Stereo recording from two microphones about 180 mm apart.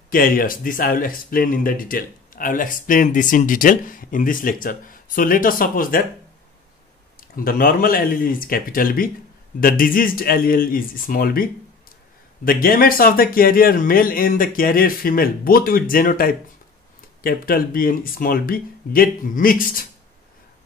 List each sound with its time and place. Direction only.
0.1 s speech: 50° left (ahead or behind)
7.2 s speech: 50° left (ahead or behind)
12.4 s speech: 55° left (ahead or behind)